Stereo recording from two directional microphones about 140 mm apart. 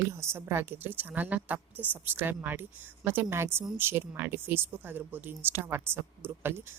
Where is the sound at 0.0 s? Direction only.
20° right (ahead or behind).